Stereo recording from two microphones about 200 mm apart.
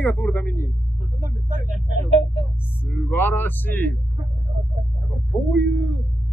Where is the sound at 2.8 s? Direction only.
10° left (ahead or behind).